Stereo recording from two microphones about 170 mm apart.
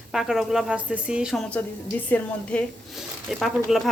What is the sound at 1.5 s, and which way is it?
A woman's voice, 10° left (ahead or behind).